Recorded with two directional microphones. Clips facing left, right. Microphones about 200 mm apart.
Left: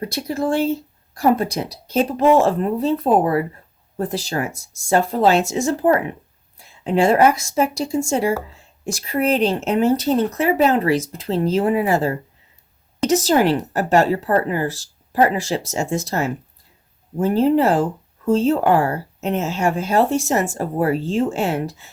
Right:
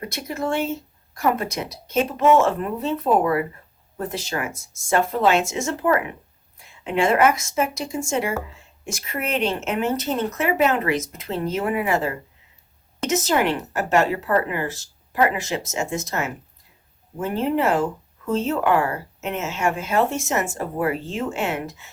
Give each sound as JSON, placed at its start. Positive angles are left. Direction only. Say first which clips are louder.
{"t": 0.0, "sound": "speech", "louder": "left 5 dB", "side_deg": 35}